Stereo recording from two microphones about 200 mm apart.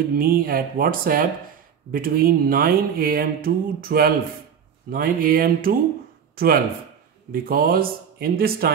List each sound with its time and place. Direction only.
0.2 s speech: 45° right (ahead or behind)